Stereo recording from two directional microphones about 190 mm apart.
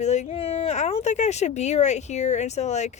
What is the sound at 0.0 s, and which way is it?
Speech, 35° left (ahead or behind).